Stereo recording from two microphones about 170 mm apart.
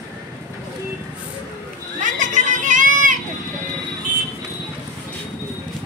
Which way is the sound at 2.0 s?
50° right (ahead or behind).